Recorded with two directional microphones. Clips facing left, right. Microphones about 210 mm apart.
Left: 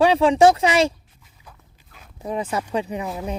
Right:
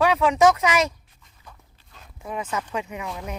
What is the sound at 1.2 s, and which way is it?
Walk, 5° left (ahead or behind).